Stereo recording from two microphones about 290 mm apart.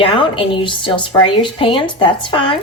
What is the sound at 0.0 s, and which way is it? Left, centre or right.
A woman's voice, centre.